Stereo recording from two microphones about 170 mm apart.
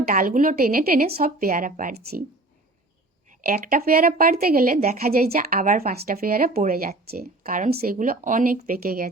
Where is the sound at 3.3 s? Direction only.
50° right (ahead or behind).